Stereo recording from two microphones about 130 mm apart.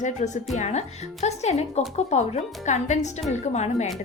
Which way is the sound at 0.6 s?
60° left (ahead or behind).